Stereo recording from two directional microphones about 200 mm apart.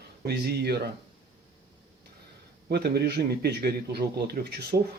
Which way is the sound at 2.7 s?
55° right (ahead or behind).